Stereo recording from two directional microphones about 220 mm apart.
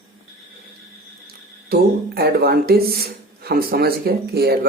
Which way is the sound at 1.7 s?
45° right (ahead or behind).